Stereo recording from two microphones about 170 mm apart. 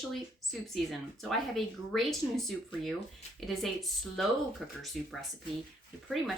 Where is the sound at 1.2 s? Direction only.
Centre (ahead or behind).